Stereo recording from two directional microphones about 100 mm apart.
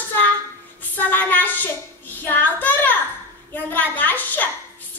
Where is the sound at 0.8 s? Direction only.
20° left (ahead or behind).